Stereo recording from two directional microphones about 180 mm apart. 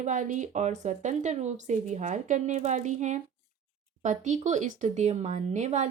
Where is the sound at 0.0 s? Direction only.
45° right (ahead or behind).